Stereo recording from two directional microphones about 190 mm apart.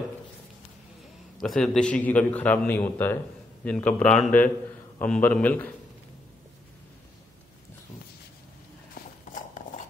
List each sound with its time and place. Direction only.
1.4 s speech: centre (ahead or behind)
9.3 s clip-clop: 45° left (ahead or behind)